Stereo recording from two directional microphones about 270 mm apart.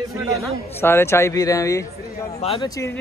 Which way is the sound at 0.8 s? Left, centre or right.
Centre.